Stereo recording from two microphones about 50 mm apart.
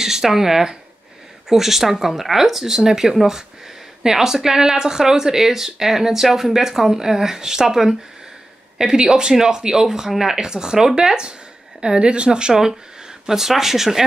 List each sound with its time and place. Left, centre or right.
0.0 s speech: centre